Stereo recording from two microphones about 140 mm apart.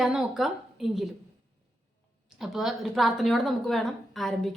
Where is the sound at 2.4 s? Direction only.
Centre (ahead or behind).